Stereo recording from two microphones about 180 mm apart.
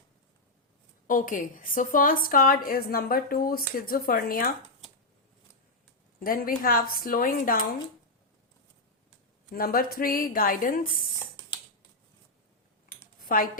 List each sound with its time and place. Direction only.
1.0 s a woman's voice: 50° left (ahead or behind)
6.1 s a woman's voice: 55° left (ahead or behind)
9.5 s a woman's voice: 55° left (ahead or behind)
12.9 s a sound: 50° left (ahead or behind)